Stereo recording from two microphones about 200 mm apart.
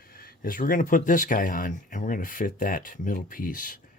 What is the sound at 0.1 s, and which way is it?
Speech, 50° left (ahead or behind).